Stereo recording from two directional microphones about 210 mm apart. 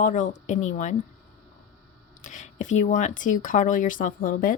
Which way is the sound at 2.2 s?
40° left (ahead or behind).